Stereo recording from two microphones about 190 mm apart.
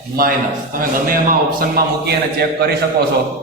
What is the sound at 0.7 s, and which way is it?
A man's voice, 45° right (ahead or behind).